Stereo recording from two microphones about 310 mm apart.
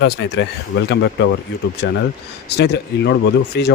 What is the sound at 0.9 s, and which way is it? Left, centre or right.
Speech, left.